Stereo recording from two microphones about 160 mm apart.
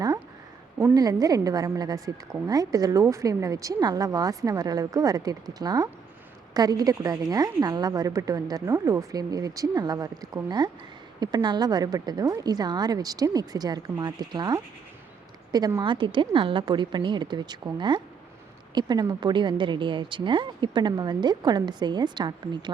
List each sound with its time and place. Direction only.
0.9 s a woman's voice: 25° right (ahead or behind)